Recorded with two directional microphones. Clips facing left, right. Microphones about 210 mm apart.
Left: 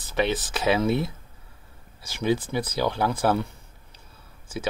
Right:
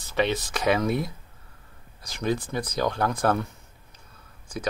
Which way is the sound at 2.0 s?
5° left (ahead or behind).